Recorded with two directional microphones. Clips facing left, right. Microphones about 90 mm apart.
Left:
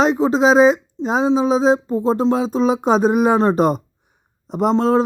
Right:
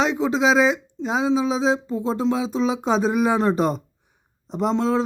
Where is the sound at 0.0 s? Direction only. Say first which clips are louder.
Left 5 dB; 40° left (ahead or behind).